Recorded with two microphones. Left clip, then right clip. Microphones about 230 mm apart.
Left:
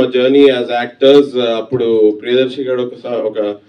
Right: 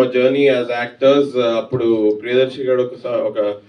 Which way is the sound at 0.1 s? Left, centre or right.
Left.